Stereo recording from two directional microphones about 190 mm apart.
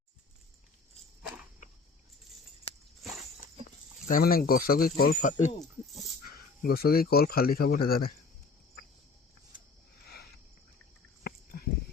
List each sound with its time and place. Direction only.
4.1 s speech: 50° left (ahead or behind)
11.2 s dog: 55° left (ahead or behind)